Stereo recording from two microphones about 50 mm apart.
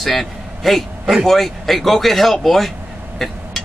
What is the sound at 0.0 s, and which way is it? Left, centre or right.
A man's voice, centre.